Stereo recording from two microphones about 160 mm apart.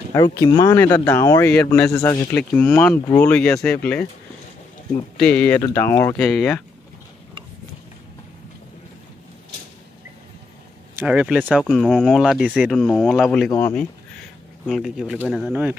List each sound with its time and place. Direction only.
0.1 s speech: 20° left (ahead or behind)
1.9 s speech: 20° left (ahead or behind)
6.2 s speech: centre (ahead or behind)
11.0 s speech: 10° right (ahead or behind)
11.4 s speech: 5° left (ahead or behind)
13.6 s speech: 10° left (ahead or behind)
14.7 s speech: centre (ahead or behind)